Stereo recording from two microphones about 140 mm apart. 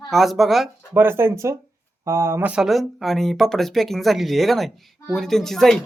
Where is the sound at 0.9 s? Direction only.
15° right (ahead or behind).